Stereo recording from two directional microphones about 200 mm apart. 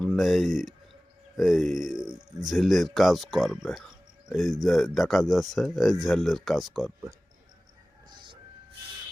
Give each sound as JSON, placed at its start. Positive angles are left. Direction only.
{"t": 0.0, "sound": "speech", "side_deg": 0}
{"t": 8.1, "sound": "music", "side_deg": -25}